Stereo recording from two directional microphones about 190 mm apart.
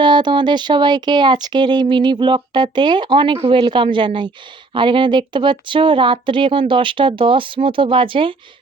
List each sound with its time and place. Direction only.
0.0 s speech: 25° right (ahead or behind)